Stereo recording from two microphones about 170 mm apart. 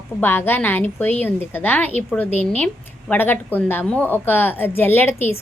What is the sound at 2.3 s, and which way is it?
Speech, 40° left (ahead or behind).